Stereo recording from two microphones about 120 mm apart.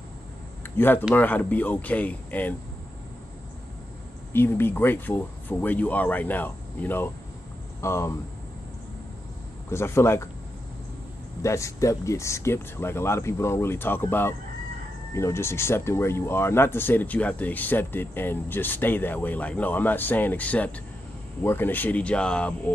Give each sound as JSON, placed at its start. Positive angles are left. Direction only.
{"t": 0.7, "sound": "speech", "side_deg": 15}
{"t": 4.3, "sound": "speech", "side_deg": 20}
{"t": 9.7, "sound": "speech", "side_deg": 20}
{"t": 11.4, "sound": "speech", "side_deg": 25}